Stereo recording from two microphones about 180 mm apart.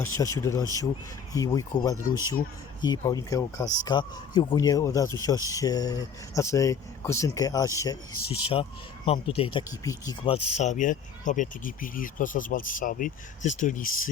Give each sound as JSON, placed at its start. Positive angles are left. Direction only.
{"t": 0.0, "sound": "speech", "side_deg": 15}
{"t": 8.4, "sound": "speech", "side_deg": 30}
{"t": 10.2, "sound": "speech", "side_deg": 35}